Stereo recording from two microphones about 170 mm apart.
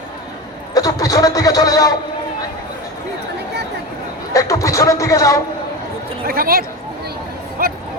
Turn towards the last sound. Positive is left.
turn(degrees=-60)  # may be behind; listen again after turning